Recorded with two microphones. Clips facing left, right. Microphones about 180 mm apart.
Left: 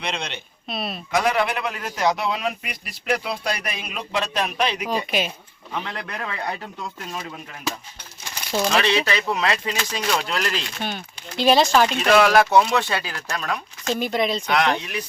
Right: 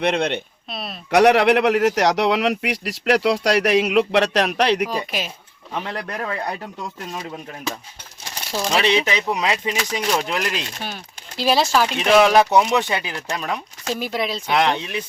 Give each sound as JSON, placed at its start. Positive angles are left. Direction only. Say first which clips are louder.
{"t": 0.0, "sound": "speech", "louder": "right 10 dB", "side_deg": -60}
{"t": 0.7, "sound": "speech", "louder": "left 3 dB", "side_deg": 0}
{"t": 1.1, "sound": "a man's voice", "louder": "right 8 dB", "side_deg": -75}
{"t": 4.9, "sound": "speech", "louder": "left 2 dB", "side_deg": 0}
{"t": 5.8, "sound": "speech", "louder": "right 4 dB", "side_deg": -35}
{"t": 8.7, "sound": "speech", "louder": "right 4 dB", "side_deg": -20}
{"t": 10.8, "sound": "speech", "louder": "left 3 dB", "side_deg": -5}
{"t": 11.9, "sound": "speech", "louder": "right 4 dB", "side_deg": -20}
{"t": 13.8, "sound": "speech", "louder": "left 2 dB", "side_deg": -5}
{"t": 14.5, "sound": "speech", "louder": "right 6 dB", "side_deg": -25}